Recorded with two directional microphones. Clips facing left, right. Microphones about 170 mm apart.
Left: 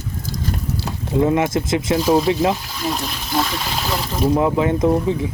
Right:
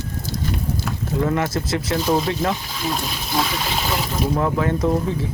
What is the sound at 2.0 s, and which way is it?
Speech, 5° left (ahead or behind).